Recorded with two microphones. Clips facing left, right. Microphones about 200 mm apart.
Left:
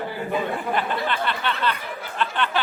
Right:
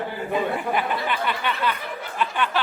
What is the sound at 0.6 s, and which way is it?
Speech, 10° right (ahead or behind).